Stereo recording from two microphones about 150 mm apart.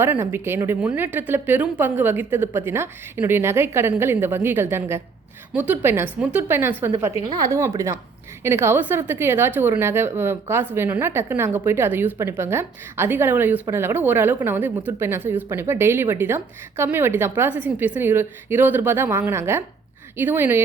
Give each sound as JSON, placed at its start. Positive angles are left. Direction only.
{"t": 0.0, "sound": "a woman's voice", "side_deg": -15}